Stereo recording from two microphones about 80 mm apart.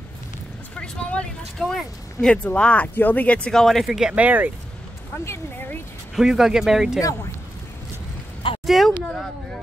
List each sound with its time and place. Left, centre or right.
0.7 s speech: centre
3.6 s speech: centre
4.1 s speech: centre
5.2 s speech: left
6.1 s speech: centre
8.6 s speech: centre